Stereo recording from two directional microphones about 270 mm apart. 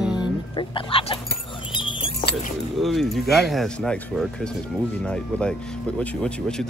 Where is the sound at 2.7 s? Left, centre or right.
Centre.